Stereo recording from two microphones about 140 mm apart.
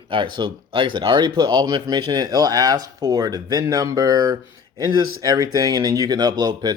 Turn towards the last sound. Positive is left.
turn(degrees=-30)  # may be behind; listen again after turning